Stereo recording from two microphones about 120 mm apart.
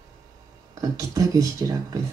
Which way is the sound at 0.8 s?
30° right (ahead or behind).